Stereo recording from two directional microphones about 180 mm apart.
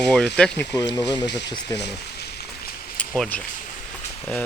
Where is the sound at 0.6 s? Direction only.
15° left (ahead or behind).